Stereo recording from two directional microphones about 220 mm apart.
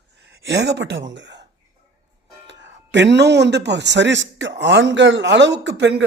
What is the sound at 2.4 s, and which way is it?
Speech, 55° right (ahead or behind).